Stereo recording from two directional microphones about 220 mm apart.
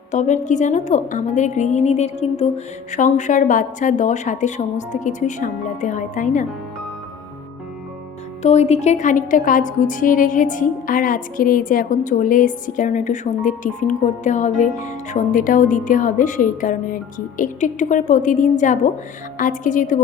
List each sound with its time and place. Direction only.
0.1 s a woman's voice: 35° left (ahead or behind)
8.4 s a woman's voice: 30° left (ahead or behind)